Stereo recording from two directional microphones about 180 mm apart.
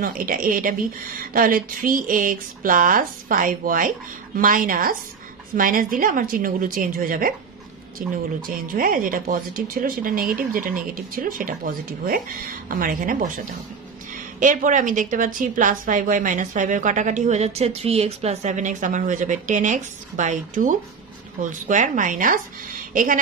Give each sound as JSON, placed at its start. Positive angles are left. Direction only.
{"t": 0.0, "sound": "a woman's voice", "side_deg": -50}